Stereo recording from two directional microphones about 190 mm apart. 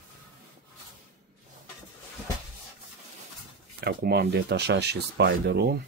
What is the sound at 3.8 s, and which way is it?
Speech, 60° right (ahead or behind).